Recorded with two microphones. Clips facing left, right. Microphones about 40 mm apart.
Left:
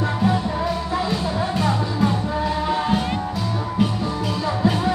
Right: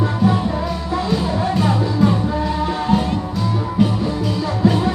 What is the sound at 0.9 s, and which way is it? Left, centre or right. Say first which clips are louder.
Music: right 6 dB; centre.